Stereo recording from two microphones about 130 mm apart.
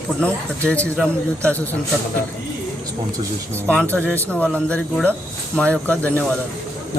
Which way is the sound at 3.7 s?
10° left (ahead or behind).